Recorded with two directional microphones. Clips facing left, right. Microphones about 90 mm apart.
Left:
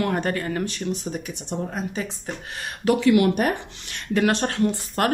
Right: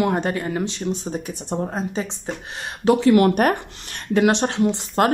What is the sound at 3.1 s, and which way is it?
Speech, 50° right (ahead or behind).